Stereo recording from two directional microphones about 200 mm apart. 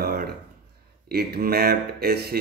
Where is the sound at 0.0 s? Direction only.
50° right (ahead or behind).